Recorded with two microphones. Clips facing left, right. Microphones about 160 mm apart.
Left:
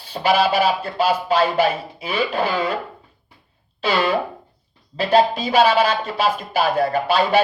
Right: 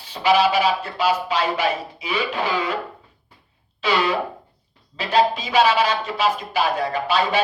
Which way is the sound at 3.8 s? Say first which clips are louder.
Left 1 dB; 55° left (ahead or behind).